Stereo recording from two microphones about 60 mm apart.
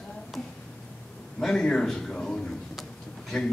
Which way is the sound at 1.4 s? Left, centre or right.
Centre.